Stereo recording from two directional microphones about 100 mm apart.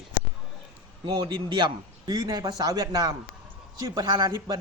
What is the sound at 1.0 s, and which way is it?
A man's voice, 50° right (ahead or behind).